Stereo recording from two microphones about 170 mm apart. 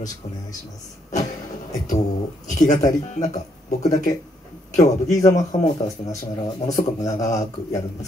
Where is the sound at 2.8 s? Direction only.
20° left (ahead or behind).